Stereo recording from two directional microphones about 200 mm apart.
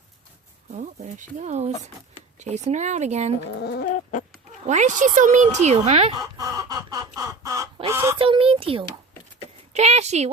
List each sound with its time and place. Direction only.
0.7 s speech: 35° right (ahead or behind)
3.6 s chicken: 55° left (ahead or behind)
4.6 s speech: 35° right (ahead or behind)
6.1 s chicken: 15° right (ahead or behind)
8.2 s speech: 25° right (ahead or behind)
9.4 s a sound: 30° right (ahead or behind)